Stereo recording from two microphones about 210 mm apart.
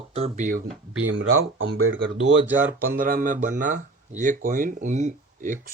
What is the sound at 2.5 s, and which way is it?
Speech, 10° right (ahead or behind).